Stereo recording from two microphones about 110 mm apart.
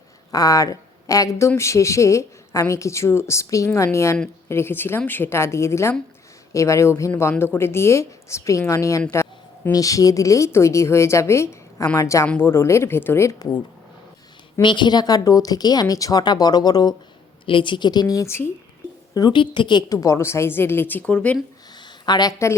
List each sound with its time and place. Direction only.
0.3 s speech: 35° left (ahead or behind)
14.6 s speech: 45° left (ahead or behind)
17.4 s speech: 50° left (ahead or behind); by 18.4 s 25° left (ahead or behind)
19.1 s a woman's voice: 40° left (ahead or behind)
20.0 s speech: 25° left (ahead or behind); by 21.3 s 10° left (ahead or behind)
21.8 s a sound: 40° left (ahead or behind)